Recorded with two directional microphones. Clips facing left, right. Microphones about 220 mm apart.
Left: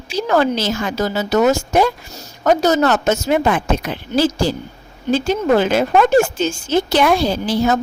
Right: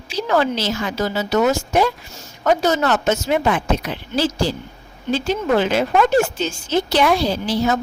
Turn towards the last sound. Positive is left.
turn(degrees=50)  # may be behind; listen again after turning